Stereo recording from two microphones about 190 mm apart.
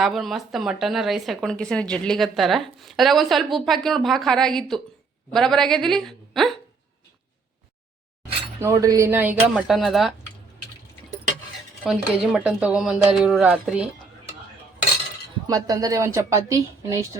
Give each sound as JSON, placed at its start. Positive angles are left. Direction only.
{"t": 0.0, "sound": "speech", "side_deg": 0}
{"t": 8.6, "sound": "a woman's voice", "side_deg": -20}
{"t": 11.8, "sound": "speech", "side_deg": 0}
{"t": 15.4, "sound": "a woman's voice", "side_deg": -20}